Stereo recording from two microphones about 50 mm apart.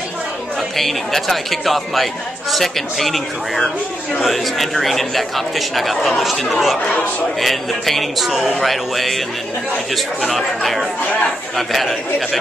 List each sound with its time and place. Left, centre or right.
0.7 s speech: centre
6.9 s a man's voice: left
7.3 s speech: centre